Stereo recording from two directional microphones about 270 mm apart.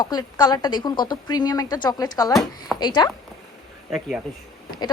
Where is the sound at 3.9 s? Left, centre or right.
Centre.